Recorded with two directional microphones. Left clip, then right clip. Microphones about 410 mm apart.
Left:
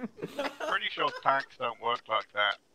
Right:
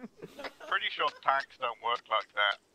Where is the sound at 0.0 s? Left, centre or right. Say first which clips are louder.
Left 8 dB; centre.